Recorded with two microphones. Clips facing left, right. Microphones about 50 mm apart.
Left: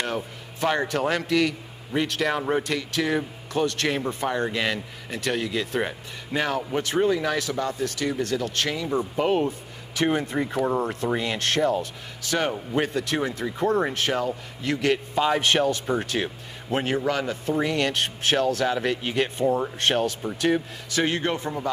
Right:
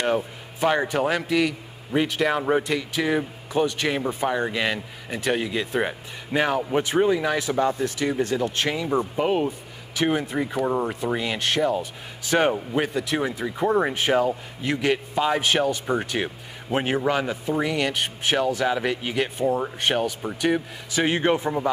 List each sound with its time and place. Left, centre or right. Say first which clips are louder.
0.0 s a man's voice: right 5 dB; centre
8.8 s a man's voice: even; centre
12.3 s a man's voice: right 5 dB; right
12.5 s a man's voice: right 1 dB; centre
15.1 s a man's voice: left 1 dB; centre